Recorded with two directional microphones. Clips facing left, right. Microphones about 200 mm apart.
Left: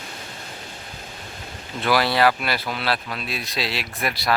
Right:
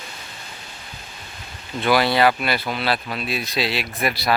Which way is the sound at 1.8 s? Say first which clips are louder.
Right 2 dB; centre (ahead or behind).